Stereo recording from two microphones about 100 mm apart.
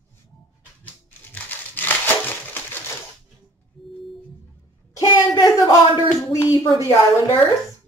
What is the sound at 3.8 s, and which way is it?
Music, 5° left (ahead or behind).